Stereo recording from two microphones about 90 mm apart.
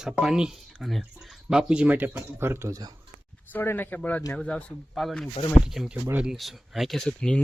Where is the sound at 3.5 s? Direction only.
20° left (ahead or behind).